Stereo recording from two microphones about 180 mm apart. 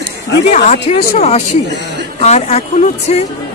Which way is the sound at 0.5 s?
40° left (ahead or behind).